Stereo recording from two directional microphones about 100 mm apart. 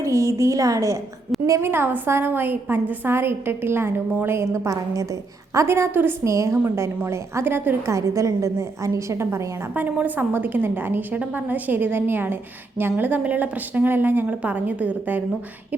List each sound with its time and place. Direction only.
0.0 s a woman's voice: 30° right (ahead or behind)
7.9 s a woman's voice: 30° right (ahead or behind); by 15.2 s 15° right (ahead or behind)